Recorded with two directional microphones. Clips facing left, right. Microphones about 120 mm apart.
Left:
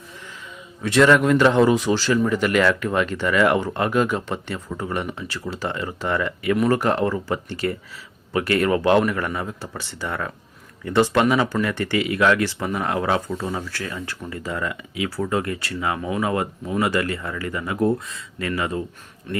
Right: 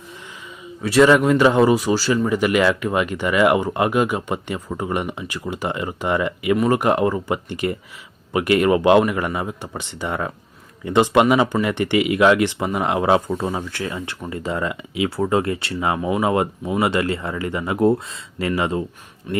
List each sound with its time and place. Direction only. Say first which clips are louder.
0.8 s speech: right 2 dB; 5° right (ahead or behind); by 16.0 s 25° right (ahead or behind)
16.0 s speech: right 5 dB; 15° right (ahead or behind)
19.3 s speech: right 4 dB; 10° right (ahead or behind)